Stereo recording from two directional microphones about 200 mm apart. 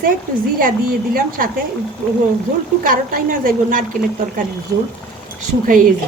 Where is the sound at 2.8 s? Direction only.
45° right (ahead or behind).